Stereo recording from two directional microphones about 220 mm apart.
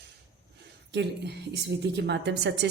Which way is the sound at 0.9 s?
50° right (ahead or behind).